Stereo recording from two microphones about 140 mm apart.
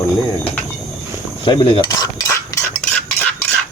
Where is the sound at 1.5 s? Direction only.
35° left (ahead or behind).